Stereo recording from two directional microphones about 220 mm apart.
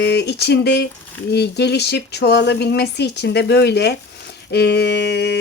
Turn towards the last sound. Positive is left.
turn(degrees=50)  # may be behind; listen again after turning